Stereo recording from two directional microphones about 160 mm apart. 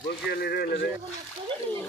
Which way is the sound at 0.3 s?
80° left.